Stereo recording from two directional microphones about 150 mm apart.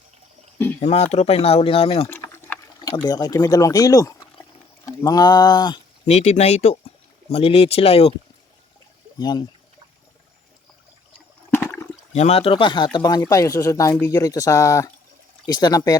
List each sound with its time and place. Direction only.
0.8 s speech: 45° left (ahead or behind)
2.0 s a sound: 15° left (ahead or behind)
4.9 s speech: 25° left (ahead or behind)
6.1 s speech: 50° left (ahead or behind)
9.1 s speech: 30° left (ahead or behind)
11.5 s toilet flush: 15° left (ahead or behind)
12.1 s speech: 45° left (ahead or behind); by 16.0 s 25° left (ahead or behind)